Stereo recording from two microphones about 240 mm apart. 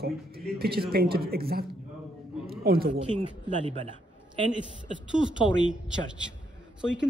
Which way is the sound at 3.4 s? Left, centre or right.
Centre.